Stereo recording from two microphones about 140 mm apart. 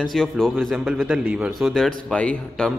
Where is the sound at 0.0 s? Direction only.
5° left (ahead or behind).